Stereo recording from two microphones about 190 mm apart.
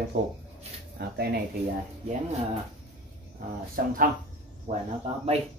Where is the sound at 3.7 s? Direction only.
45° right (ahead or behind).